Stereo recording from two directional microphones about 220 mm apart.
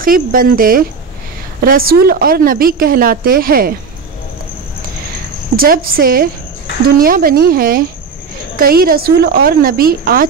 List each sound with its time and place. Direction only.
0.0 s a woman's voice: 40° right (ahead or behind)
5.6 s a woman's voice: 40° right (ahead or behind)